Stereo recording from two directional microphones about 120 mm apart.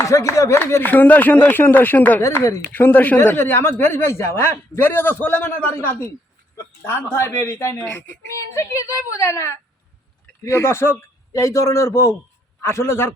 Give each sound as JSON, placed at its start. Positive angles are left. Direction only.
{"t": 0.0, "sound": "a woman's voice", "side_deg": 25}
{"t": 8.4, "sound": "a woman's voice", "side_deg": 25}